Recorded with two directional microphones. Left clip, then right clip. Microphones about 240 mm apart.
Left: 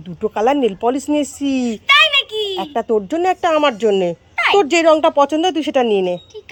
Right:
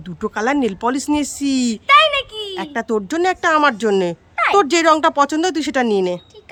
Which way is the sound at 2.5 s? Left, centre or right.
Right.